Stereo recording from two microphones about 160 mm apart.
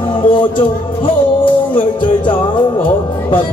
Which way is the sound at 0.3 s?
30° left (ahead or behind).